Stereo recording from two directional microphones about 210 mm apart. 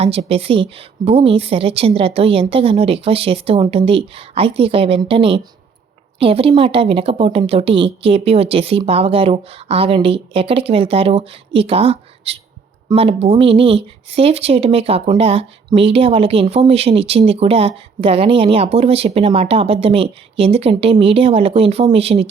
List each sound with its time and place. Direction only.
0.0 s speech: 30° right (ahead or behind)